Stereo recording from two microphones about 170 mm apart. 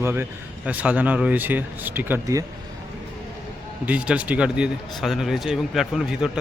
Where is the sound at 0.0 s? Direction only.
10° right (ahead or behind).